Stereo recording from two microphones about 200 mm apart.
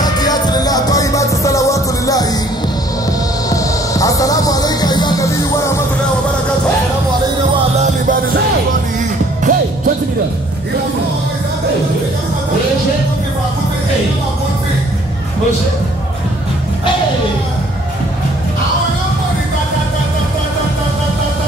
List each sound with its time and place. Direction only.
0.0 s music: 20° left (ahead or behind)
3.4 s music: 15° left (ahead or behind)
7.8 s music: 45° right (ahead or behind)